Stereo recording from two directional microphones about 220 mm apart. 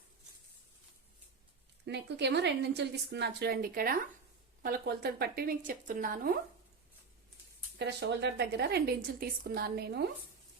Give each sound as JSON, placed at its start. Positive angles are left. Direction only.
{"t": 1.9, "sound": "speech", "side_deg": -50}
{"t": 7.8, "sound": "speech", "side_deg": -50}